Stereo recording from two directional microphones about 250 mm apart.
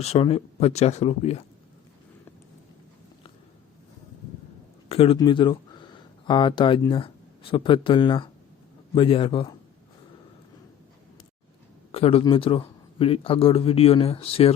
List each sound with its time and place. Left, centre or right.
0.0 s a man's voice: left
4.9 s a man's voice: left
11.9 s a man's voice: left